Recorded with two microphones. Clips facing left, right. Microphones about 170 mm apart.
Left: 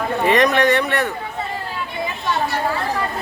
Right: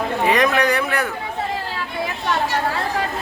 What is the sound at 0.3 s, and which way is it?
Speech, centre (ahead or behind).